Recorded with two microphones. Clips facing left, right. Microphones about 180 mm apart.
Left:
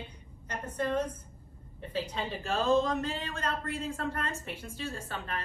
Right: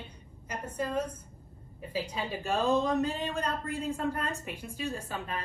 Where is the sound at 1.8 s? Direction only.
10° right (ahead or behind).